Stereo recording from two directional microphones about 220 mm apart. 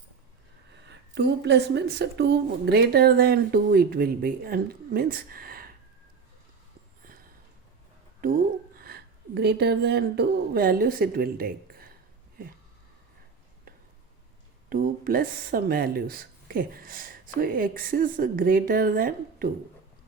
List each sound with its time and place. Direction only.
0.9 s a woman's voice: 50° right (ahead or behind)
8.2 s speech: 40° right (ahead or behind)
14.7 s speech: 40° right (ahead or behind)